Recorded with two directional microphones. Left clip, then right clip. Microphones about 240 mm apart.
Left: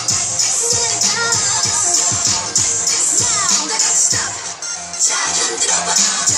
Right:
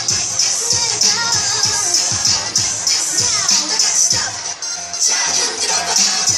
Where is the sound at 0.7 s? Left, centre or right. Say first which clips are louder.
Right 1 dB; left.